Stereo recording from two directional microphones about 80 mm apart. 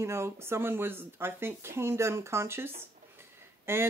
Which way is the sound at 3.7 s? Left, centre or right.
Right.